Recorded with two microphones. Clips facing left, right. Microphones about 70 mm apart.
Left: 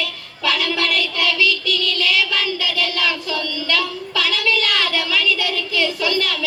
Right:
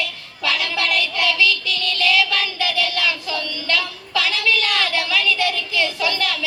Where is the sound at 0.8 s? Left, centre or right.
Right.